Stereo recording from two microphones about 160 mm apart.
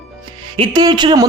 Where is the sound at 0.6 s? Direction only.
30° right (ahead or behind).